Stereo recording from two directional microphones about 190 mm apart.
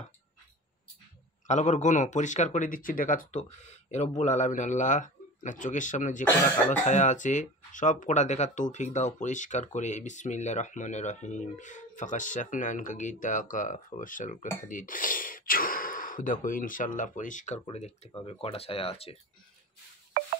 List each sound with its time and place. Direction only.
1.5 s speech: 40° left (ahead or behind)